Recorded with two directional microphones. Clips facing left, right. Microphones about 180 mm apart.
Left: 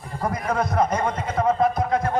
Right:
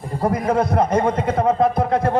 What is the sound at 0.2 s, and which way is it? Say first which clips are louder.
Speech: right 5 dB; 30° right (ahead or behind).